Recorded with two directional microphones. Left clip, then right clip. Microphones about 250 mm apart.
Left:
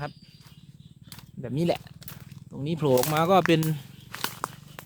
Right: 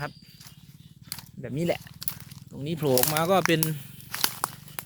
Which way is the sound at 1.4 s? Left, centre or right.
Centre.